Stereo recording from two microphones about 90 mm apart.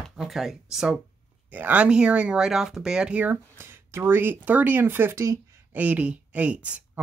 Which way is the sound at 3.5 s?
25° right (ahead or behind).